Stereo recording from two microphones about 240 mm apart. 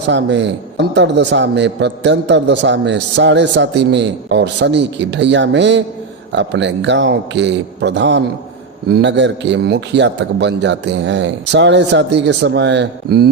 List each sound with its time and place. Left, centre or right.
0.1 s a man's voice: right